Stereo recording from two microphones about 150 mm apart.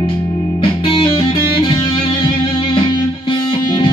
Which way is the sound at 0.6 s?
35° left (ahead or behind).